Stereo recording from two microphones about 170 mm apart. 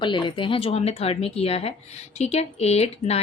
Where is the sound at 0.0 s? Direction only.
30° left (ahead or behind).